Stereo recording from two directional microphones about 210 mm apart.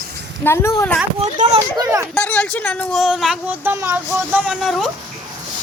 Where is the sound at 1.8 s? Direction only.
15° right (ahead or behind).